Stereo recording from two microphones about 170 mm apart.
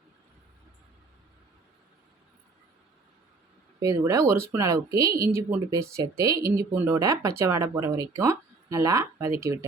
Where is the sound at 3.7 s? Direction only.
20° right (ahead or behind).